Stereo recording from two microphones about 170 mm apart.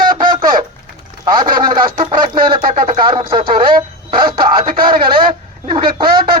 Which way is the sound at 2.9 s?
30° right (ahead or behind).